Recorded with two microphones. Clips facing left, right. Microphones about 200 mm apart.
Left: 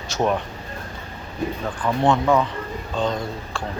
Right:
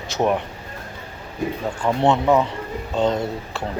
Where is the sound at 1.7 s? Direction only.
25° right (ahead or behind).